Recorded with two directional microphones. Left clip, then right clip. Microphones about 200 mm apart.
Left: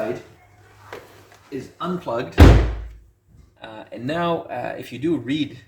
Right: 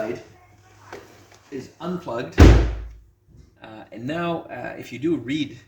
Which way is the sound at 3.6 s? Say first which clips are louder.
Left 3 dB; centre (ahead or behind).